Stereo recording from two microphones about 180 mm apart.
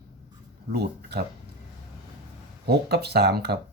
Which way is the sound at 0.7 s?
65° right (ahead or behind).